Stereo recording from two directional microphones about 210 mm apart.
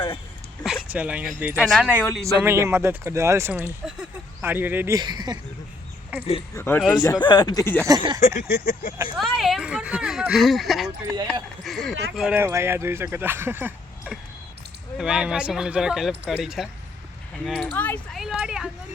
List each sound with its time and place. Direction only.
0.6 s a sound: 5° right (ahead or behind)
1.6 s speech: centre (ahead or behind); by 5.4 s 20° right (ahead or behind)
6.5 s speech: 10° left (ahead or behind)
7.9 s speech: 20° right (ahead or behind)
8.4 s a sound: 45° left (ahead or behind)
9.1 s speech: centre (ahead or behind)